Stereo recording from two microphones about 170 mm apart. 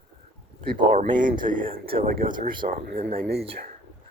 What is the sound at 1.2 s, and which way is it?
Speech, 50° right (ahead or behind).